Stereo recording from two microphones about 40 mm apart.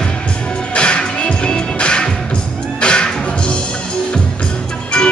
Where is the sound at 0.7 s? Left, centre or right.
Left.